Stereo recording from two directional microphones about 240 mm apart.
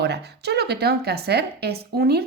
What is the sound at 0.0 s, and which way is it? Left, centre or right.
Speech, right.